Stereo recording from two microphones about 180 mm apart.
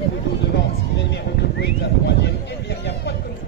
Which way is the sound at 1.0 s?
70° left (ahead or behind).